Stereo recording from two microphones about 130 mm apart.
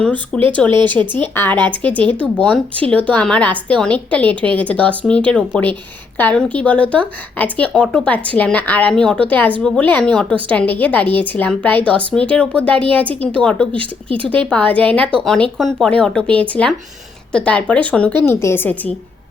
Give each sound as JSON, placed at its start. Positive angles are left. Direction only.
{"t": 0.0, "sound": "speech", "side_deg": 10}
{"t": 0.7, "sound": "speech", "side_deg": -35}
{"t": 1.2, "sound": "speech", "side_deg": 15}
{"t": 13.7, "sound": "speech", "side_deg": -40}
{"t": 14.5, "sound": "speech", "side_deg": 10}